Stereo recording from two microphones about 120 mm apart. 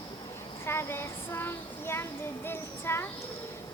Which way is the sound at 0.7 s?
20° left (ahead or behind).